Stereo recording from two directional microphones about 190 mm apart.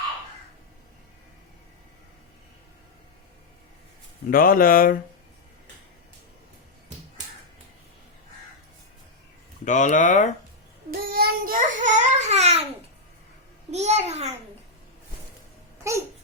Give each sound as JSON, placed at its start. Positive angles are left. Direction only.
{"t": 4.3, "sound": "speech", "side_deg": 50}
{"t": 9.6, "sound": "speech", "side_deg": 40}
{"t": 11.1, "sound": "a sound", "side_deg": -50}
{"t": 13.7, "sound": "a child's voice", "side_deg": -35}
{"t": 15.9, "sound": "babbling", "side_deg": -15}